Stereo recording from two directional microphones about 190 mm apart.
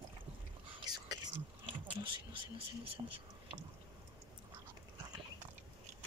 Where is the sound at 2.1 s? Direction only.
25° right (ahead or behind).